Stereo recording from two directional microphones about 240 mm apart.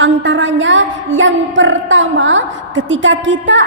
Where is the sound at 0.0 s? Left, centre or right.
Right.